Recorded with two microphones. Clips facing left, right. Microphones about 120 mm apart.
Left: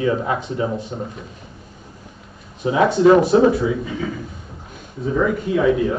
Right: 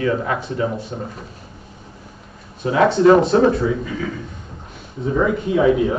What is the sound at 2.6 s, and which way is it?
Speech, 15° left (ahead or behind).